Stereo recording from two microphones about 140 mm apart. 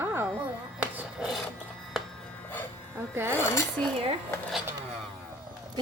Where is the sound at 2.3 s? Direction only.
10° left (ahead or behind).